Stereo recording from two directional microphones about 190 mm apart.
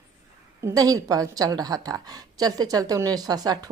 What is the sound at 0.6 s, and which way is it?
A woman's voice, 20° right (ahead or behind).